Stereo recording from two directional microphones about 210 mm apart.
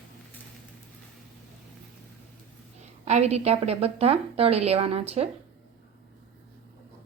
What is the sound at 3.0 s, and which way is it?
A woman's voice, 30° right (ahead or behind).